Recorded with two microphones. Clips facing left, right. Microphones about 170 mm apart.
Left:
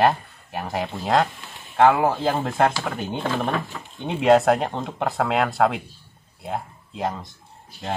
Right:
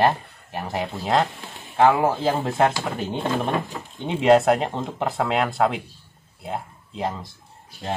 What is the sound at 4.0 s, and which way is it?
Speech, centre (ahead or behind).